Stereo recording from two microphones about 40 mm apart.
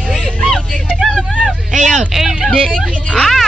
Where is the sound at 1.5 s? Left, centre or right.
Centre.